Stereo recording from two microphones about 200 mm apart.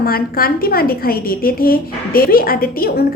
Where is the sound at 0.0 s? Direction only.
50° left (ahead or behind).